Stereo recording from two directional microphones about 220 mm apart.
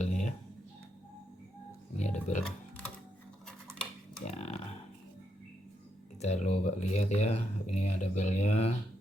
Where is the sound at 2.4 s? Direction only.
5° left (ahead or behind).